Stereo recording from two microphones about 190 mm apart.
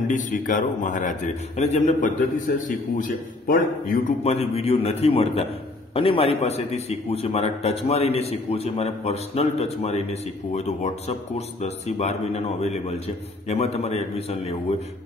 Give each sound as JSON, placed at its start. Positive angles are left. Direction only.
{"t": 0.1, "sound": "a man's voice", "side_deg": 45}
{"t": 4.2, "sound": "a man's voice", "side_deg": 35}